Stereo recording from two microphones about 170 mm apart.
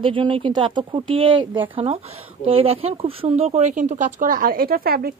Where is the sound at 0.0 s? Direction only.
30° right (ahead or behind).